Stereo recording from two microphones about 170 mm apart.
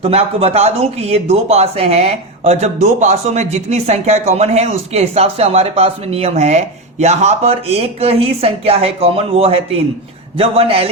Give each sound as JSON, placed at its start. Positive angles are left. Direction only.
{"t": 0.0, "sound": "speech", "side_deg": -35}